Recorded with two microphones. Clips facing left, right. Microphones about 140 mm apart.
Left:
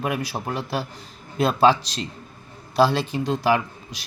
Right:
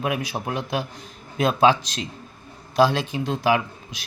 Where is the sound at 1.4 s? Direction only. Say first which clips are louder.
Even; 10° right (ahead or behind).